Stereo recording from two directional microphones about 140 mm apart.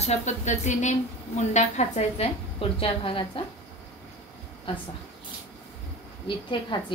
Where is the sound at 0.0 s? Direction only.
55° left (ahead or behind); by 3.4 s 40° left (ahead or behind).